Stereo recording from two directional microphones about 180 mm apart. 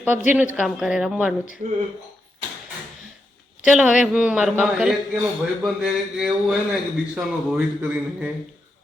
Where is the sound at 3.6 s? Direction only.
5° right (ahead or behind).